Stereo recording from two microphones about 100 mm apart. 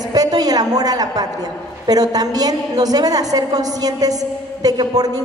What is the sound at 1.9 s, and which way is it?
A woman's voice, 40° right (ahead or behind).